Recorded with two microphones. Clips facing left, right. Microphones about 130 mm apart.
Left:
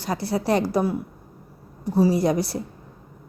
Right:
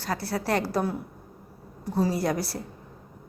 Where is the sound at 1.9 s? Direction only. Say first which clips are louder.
Left 6 dB; 15° left (ahead or behind).